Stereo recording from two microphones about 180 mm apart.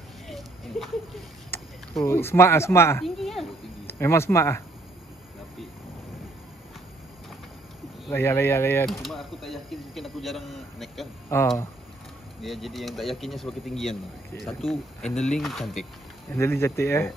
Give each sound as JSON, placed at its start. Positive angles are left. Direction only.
{"t": 0.3, "sound": "a sound", "side_deg": 0}
{"t": 2.0, "sound": "speech", "side_deg": 15}
{"t": 3.0, "sound": "speech", "side_deg": 0}
{"t": 3.8, "sound": "speech", "side_deg": 15}
{"t": 8.1, "sound": "speech", "side_deg": 10}
{"t": 8.8, "sound": "speech", "side_deg": 0}
{"t": 11.2, "sound": "speech", "side_deg": 15}
{"t": 12.4, "sound": "speech", "side_deg": 0}
{"t": 16.3, "sound": "speech", "side_deg": 15}